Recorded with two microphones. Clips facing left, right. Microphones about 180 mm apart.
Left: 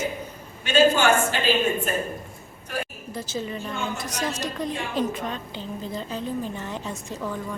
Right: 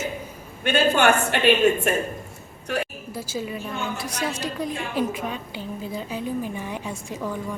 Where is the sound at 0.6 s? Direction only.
55° right (ahead or behind).